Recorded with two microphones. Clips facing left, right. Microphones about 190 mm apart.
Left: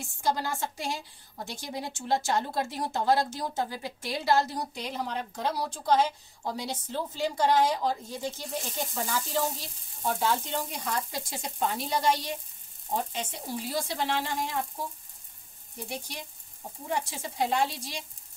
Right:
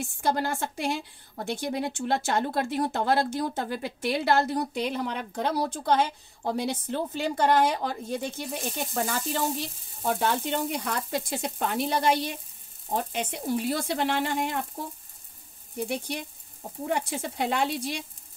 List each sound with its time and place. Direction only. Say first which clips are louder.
0.0 s a woman's voice: right 3 dB; 60° right (ahead or behind)
15.9 s a woman's voice: right 7 dB; 60° right (ahead or behind)